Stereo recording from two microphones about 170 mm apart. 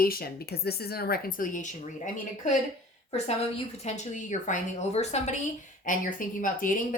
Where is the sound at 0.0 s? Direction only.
60° left (ahead or behind).